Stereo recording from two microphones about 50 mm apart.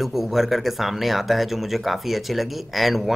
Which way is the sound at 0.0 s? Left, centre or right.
Centre.